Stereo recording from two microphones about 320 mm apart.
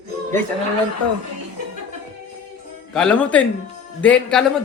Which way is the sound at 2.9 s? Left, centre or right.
Centre.